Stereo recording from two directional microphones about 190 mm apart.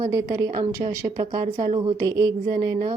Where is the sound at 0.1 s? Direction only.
20° right (ahead or behind).